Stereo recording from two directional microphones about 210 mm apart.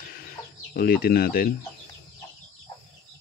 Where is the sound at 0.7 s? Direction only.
45° left (ahead or behind).